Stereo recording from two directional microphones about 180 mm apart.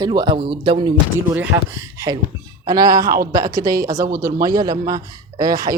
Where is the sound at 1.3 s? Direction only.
15° right (ahead or behind).